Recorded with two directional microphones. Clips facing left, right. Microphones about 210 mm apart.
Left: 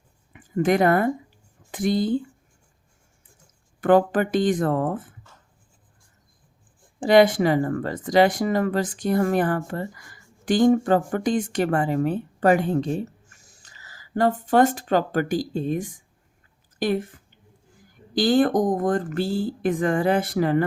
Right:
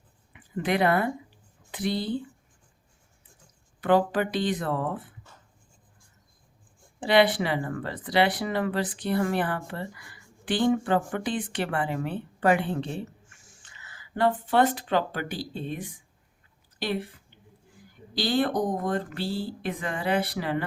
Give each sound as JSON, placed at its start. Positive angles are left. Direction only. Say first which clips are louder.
{"t": 0.3, "sound": "speech", "louder": "left 6 dB", "side_deg": 45}
{"t": 3.8, "sound": "speech", "louder": "left 5 dB", "side_deg": 50}
{"t": 7.0, "sound": "speech", "louder": "left 6 dB", "side_deg": 45}